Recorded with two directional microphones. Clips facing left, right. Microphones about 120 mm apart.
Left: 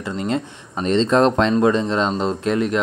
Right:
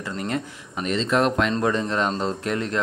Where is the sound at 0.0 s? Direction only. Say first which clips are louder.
Left 5 dB; 20° left (ahead or behind).